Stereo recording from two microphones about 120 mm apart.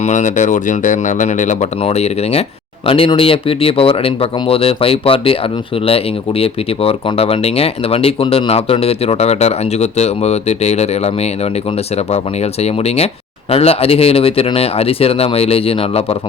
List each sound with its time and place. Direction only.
0.0 s speech: 90° left; by 2.4 s 60° left (ahead or behind)
2.8 s speech: 50° left (ahead or behind)
6.4 s speech: 55° left (ahead or behind)
12.6 s speech: 60° left (ahead or behind)